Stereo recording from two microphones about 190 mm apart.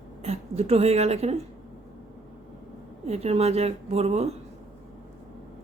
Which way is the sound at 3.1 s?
35° right (ahead or behind).